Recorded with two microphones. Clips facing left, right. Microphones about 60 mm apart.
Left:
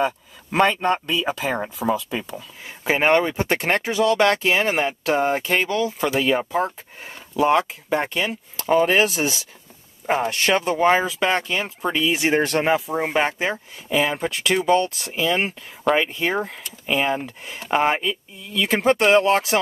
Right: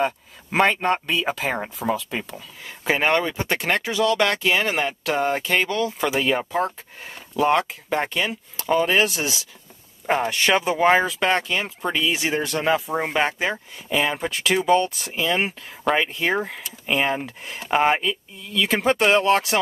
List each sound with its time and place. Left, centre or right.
1.2 s speech: centre; by 4.6 s left
4.6 s speech: centre
9.2 s speech: left
10.0 s speech: centre
10.5 s speech: centre
12.3 s speech: left
12.9 s speech: centre
18.4 s speech: centre